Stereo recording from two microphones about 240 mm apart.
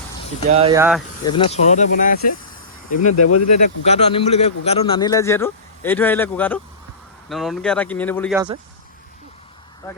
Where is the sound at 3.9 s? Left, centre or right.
Left; by 8.3 s centre.